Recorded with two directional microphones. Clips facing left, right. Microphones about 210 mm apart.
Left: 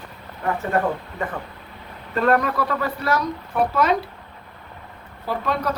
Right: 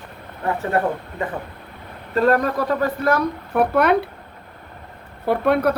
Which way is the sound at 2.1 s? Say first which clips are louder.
Right 2 dB; 40° right (ahead or behind).